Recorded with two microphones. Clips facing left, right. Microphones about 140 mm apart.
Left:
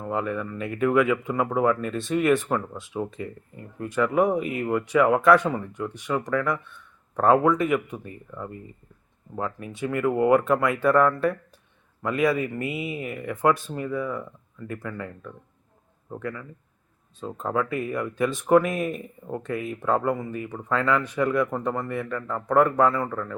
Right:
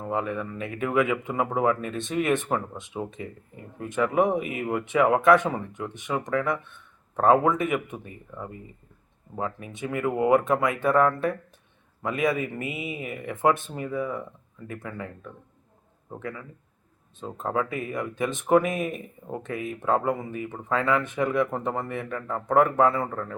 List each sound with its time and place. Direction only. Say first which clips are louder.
0.1 s speech: left 1 dB; 20° right (ahead or behind)
9.4 s speech: left 2 dB; 20° right (ahead or behind)
17.4 s speech: left 2 dB; 20° right (ahead or behind)